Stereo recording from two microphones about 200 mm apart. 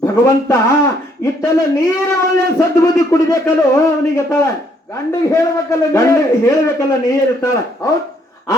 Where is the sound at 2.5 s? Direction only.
15° left (ahead or behind).